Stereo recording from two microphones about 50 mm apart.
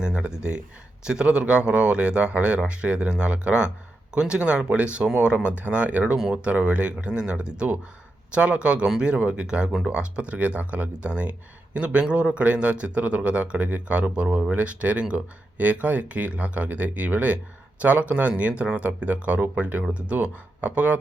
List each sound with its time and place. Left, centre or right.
0.0 s speech: right